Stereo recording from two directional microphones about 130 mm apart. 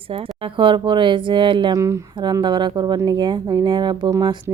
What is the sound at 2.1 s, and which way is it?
Speech, 35° right (ahead or behind).